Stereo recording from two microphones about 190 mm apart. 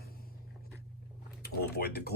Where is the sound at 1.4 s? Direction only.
55° left (ahead or behind).